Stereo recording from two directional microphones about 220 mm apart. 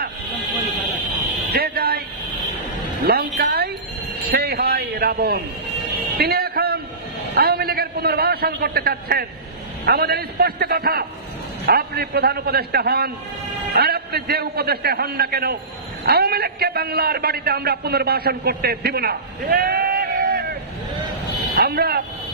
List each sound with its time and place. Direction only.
1.5 s a sound: 45° right (ahead or behind)
6.1 s music: 45° right (ahead or behind)
7.3 s a man's voice: 45° right (ahead or behind)
21.5 s vehicle: 45° right (ahead or behind)